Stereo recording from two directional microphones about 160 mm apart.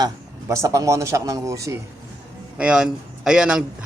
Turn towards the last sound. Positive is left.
turn(degrees=-5)  # may be behind; listen again after turning